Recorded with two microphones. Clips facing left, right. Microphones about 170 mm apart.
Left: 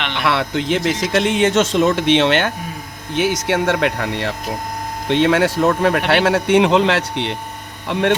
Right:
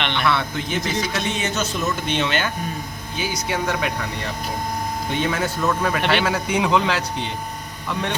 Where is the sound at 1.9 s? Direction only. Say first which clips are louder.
Left 8 dB; 80° left.